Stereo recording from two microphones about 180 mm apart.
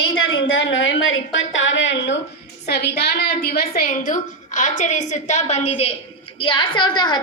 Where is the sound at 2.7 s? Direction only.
60° left (ahead or behind).